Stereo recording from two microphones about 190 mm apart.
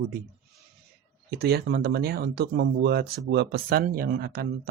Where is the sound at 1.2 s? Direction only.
55° right (ahead or behind).